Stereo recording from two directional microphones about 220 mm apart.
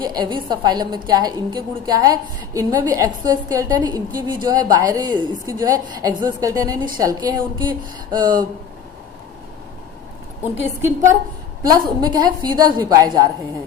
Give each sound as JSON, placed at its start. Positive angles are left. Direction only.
{"t": 0.0, "sound": "a woman's voice", "side_deg": -20}
{"t": 10.4, "sound": "a woman's voice", "side_deg": -10}